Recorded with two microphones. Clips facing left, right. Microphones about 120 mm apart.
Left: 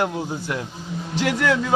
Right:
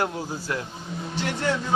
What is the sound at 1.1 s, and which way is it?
Speech, 90° left.